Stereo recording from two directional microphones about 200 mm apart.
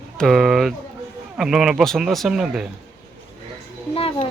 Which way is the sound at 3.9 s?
30° left (ahead or behind).